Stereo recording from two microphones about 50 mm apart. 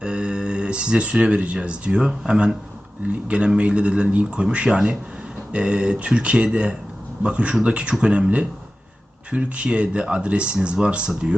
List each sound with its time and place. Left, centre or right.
0.0 s speech: centre